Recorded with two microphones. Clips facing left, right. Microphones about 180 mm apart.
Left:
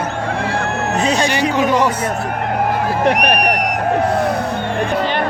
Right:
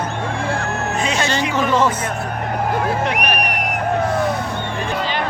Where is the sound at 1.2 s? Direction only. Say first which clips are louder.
Left 3 dB; 15° left (ahead or behind).